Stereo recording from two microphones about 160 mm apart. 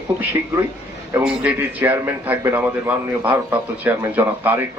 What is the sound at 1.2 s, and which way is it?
A man's voice, 10° right (ahead or behind).